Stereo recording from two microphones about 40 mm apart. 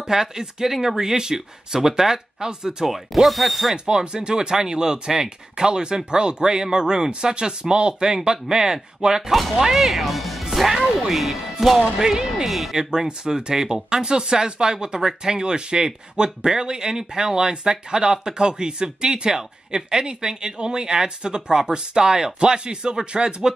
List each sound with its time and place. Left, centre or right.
0.0 s speech: centre
3.3 s speech: centre
3.7 s speech: centre
10.7 s music: centre
11.8 s speech: centre
12.4 s speech: centre
12.7 s speech: centre